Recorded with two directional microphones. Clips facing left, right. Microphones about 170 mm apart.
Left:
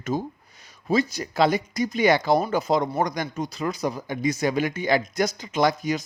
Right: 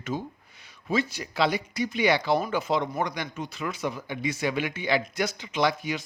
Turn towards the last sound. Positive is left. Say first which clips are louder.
# left 4 dB
turn(degrees=40)  # may be behind; listen again after turning